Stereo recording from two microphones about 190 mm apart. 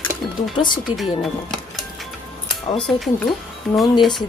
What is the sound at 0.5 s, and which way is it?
Speech, 25° left (ahead or behind).